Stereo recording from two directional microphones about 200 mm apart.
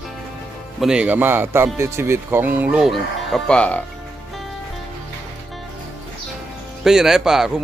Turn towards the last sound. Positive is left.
turn(degrees=0)  # may be behind; listen again after turning